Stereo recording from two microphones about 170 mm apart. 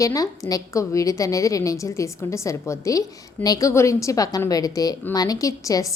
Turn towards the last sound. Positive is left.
turn(degrees=20)  # may be behind; listen again after turning